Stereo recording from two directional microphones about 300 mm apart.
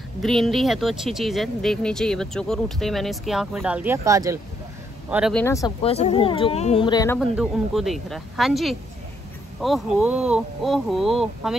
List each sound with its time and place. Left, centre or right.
0.2 s speech: centre
5.1 s speech: centre
7.2 s speech: centre